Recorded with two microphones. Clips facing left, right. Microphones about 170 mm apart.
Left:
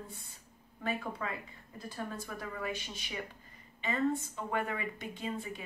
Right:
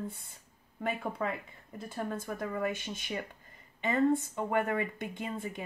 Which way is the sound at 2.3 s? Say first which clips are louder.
Right 7 dB; 50° right (ahead or behind).